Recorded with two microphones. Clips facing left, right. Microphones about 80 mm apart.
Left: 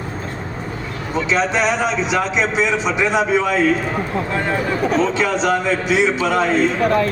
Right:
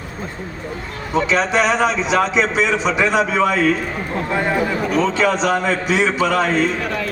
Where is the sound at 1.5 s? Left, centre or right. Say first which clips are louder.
Right 2 dB; right.